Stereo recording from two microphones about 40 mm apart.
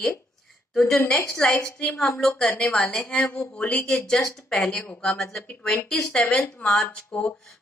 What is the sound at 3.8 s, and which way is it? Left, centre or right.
Speech, left.